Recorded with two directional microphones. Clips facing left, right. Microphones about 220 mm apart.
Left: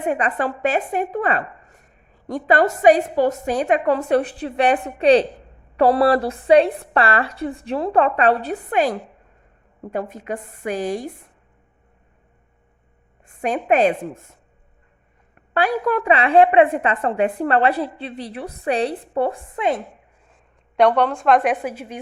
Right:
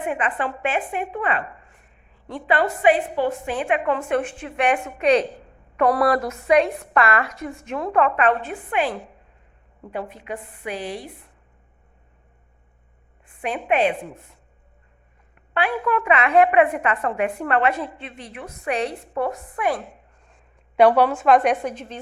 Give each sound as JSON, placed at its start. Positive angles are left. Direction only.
{"t": 0.0, "sound": "a woman's voice", "side_deg": 40}
{"t": 13.2, "sound": "a woman's voice", "side_deg": 45}
{"t": 15.5, "sound": "a woman's voice", "side_deg": 40}
{"t": 20.3, "sound": "a woman's voice", "side_deg": -5}